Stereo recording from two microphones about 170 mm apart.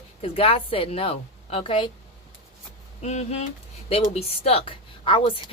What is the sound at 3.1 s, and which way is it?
Speech, 40° left (ahead or behind).